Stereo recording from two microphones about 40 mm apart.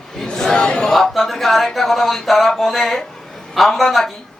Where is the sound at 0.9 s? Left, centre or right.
Centre.